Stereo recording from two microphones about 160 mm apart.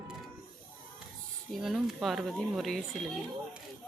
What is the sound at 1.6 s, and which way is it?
Speech, centre (ahead or behind).